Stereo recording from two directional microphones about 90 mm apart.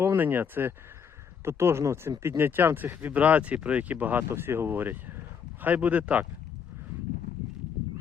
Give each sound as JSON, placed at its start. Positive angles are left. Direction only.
{"t": 0.0, "sound": "speech", "side_deg": -25}